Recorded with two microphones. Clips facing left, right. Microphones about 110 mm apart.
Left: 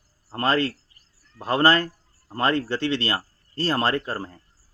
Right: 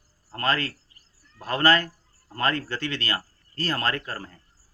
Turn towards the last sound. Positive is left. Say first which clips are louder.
# left 4 dB
turn(degrees=30)  # may be behind; listen again after turning